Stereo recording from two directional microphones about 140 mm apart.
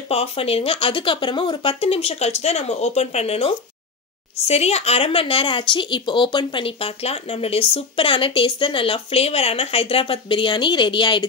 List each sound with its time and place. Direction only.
0.1 s speech: 45° left (ahead or behind)